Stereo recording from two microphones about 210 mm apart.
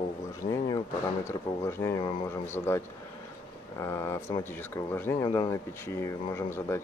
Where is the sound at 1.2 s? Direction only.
10° left (ahead or behind).